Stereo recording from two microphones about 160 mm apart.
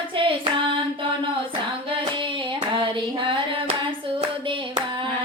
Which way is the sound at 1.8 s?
30° right (ahead or behind).